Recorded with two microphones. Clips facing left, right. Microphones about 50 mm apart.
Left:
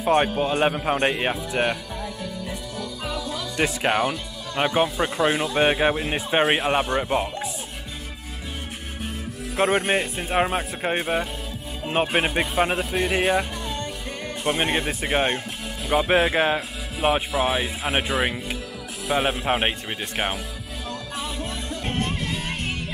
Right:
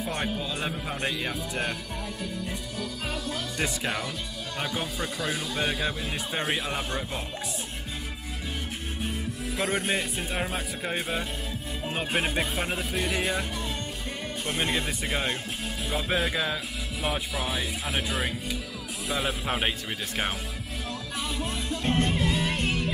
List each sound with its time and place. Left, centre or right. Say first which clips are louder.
0.0 s speech: left 10 dB; left
3.5 s speech: left 10 dB; left
9.6 s speech: left 7 dB; left
19.4 s speech: left 5 dB; left
22.1 s music: right 2 dB; centre